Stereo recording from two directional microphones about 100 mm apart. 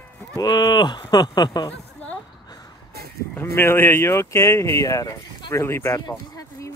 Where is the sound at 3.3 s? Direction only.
25° left (ahead or behind); by 5.5 s 45° left (ahead or behind).